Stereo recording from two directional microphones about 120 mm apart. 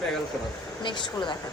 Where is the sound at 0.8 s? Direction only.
40° left (ahead or behind).